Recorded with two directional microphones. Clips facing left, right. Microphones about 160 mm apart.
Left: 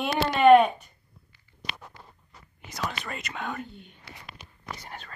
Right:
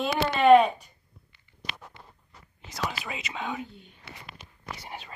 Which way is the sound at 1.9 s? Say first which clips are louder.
Left 1 dB; 25° right (ahead or behind).